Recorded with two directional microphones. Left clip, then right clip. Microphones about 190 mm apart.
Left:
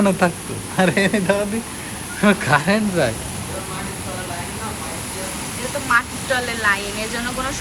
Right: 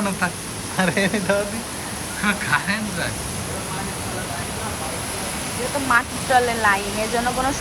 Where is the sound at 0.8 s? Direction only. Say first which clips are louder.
Left 3 dB; 10° right (ahead or behind).